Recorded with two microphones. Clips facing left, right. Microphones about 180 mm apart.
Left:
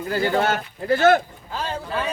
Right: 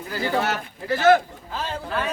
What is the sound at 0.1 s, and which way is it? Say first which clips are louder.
Speech: left 3 dB; 50° left (ahead or behind).